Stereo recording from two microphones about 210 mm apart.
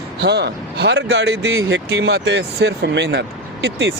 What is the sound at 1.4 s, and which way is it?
Speech, 65° right (ahead or behind).